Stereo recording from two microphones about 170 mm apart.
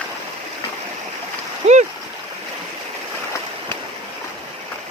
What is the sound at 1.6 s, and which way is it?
Splash, 40° right (ahead or behind).